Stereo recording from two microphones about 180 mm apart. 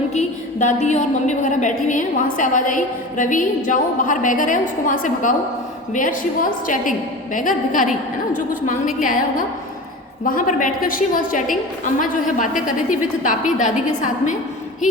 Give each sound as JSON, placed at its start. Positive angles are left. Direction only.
{"t": 0.1, "sound": "a woman's voice", "side_deg": 40}
{"t": 10.2, "sound": "a woman's voice", "side_deg": 50}
{"t": 12.6, "sound": "a woman's voice", "side_deg": 45}